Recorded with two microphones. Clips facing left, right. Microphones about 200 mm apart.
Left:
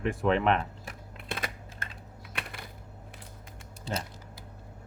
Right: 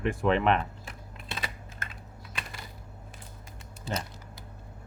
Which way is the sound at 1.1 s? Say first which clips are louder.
Left 2 dB; 55° left (ahead or behind).